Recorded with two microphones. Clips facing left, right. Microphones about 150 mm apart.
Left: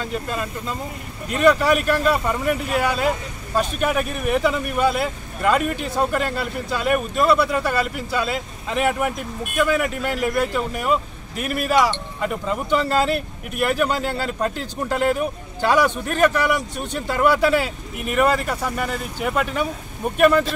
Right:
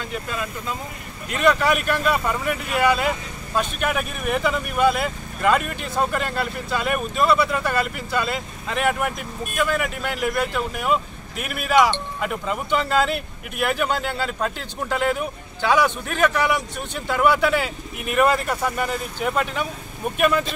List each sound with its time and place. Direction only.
0.1 s speech: centre (ahead or behind)